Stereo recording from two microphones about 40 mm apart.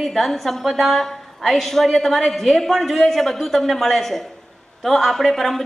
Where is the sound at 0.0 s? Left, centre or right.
Centre.